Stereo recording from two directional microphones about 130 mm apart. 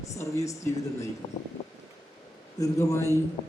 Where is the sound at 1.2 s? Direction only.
50° left (ahead or behind).